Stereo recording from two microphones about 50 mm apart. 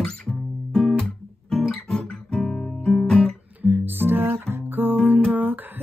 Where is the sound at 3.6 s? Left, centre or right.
Right.